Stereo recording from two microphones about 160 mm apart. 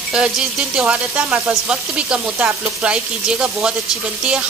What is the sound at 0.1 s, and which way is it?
Sizzle, 5° right (ahead or behind).